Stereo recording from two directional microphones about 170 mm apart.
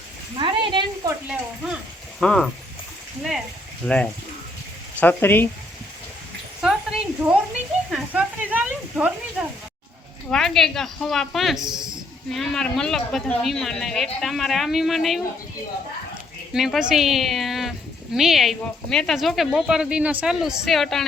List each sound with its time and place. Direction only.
0.3 s a sound: 30° right (ahead or behind)
2.2 s speech: 5° left (ahead or behind)
3.8 s speech: 5° left (ahead or behind)
6.6 s a sound: 5° right (ahead or behind)
7.9 s stir: 5° right (ahead or behind)
10.2 s speech: 5° left (ahead or behind)
16.5 s speech: centre (ahead or behind)